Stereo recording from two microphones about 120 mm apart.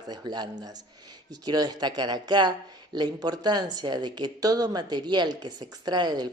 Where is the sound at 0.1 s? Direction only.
35° right (ahead or behind).